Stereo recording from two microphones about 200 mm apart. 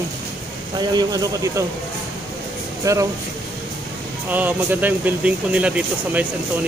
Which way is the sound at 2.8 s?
15° right (ahead or behind).